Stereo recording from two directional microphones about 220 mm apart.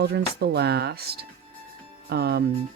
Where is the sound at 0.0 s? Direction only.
45° right (ahead or behind).